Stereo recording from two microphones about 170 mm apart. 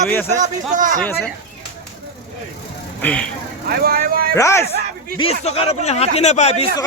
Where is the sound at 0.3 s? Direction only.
45° right (ahead or behind).